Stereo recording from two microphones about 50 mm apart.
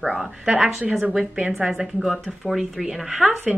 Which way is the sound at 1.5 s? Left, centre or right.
Centre.